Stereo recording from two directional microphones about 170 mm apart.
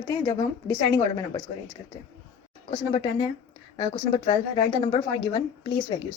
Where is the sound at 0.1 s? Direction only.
20° left (ahead or behind).